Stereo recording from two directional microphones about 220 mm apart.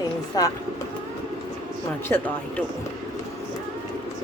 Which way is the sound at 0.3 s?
20° left (ahead or behind).